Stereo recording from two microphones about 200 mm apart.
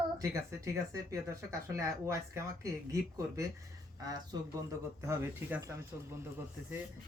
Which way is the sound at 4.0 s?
20° right (ahead or behind).